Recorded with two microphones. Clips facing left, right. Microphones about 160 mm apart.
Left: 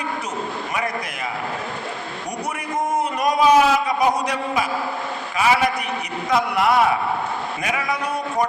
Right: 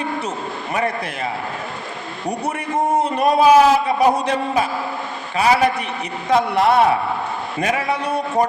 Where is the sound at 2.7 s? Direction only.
30° right (ahead or behind).